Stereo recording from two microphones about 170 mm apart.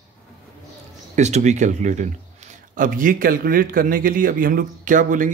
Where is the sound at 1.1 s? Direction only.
45° right (ahead or behind).